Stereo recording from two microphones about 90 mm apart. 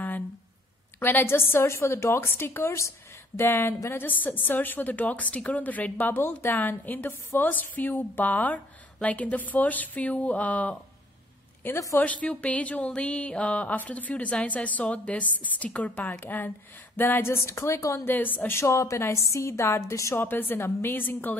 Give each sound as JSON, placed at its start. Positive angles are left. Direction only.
{"t": 0.9, "sound": "a woman's voice", "side_deg": 25}
{"t": 11.6, "sound": "a woman's voice", "side_deg": 30}
{"t": 12.0, "sound": "a woman's voice", "side_deg": 15}
{"t": 18.0, "sound": "a woman's voice", "side_deg": 20}
{"t": 20.2, "sound": "a woman's voice", "side_deg": 20}